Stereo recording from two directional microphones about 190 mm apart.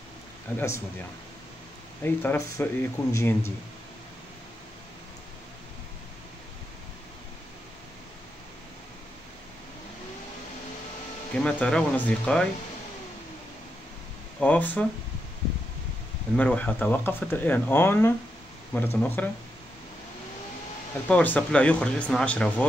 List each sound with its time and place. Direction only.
0.6 s speech: 15° left (ahead or behind)
2.0 s speech: 15° left (ahead or behind)
11.3 s speech: 5° left (ahead or behind)
14.4 s speech: 10° left (ahead or behind)
16.3 s speech: 5° left (ahead or behind)
21.1 s speech: 10° left (ahead or behind)